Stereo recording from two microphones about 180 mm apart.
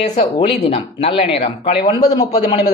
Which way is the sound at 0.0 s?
40° left (ahead or behind).